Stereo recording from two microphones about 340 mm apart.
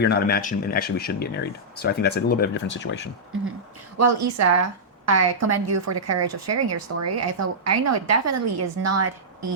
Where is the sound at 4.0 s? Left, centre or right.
Right.